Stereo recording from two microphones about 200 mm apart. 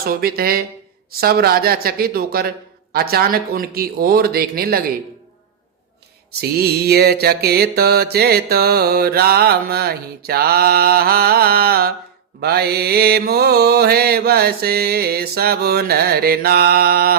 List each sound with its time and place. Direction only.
0.0 s mantra: 50° right (ahead or behind)
6.4 s mantra: 50° right (ahead or behind)